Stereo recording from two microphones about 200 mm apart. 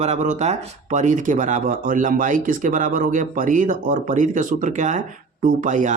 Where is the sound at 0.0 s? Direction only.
35° right (ahead or behind).